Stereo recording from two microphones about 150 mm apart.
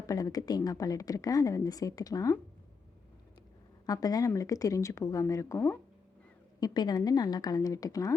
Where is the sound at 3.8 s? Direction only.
25° left (ahead or behind).